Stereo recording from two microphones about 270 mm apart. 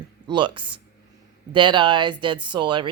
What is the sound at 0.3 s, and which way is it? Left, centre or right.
Speech, centre.